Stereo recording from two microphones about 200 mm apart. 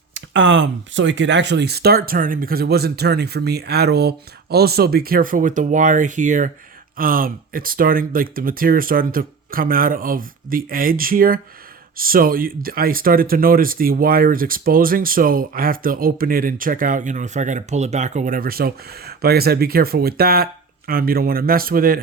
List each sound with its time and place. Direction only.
0.1 s speech: 70° right (ahead or behind); by 22.0 s 45° right (ahead or behind)